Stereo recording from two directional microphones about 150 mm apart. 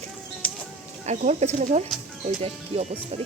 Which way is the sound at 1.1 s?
50° right (ahead or behind).